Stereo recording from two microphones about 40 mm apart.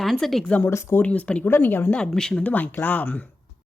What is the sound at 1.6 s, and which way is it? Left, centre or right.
Speech, left.